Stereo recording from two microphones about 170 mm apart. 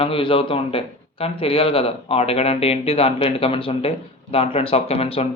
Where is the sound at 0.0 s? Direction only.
30° left (ahead or behind).